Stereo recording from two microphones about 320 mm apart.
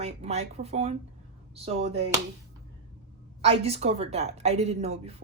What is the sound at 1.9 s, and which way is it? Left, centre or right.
Speech, centre.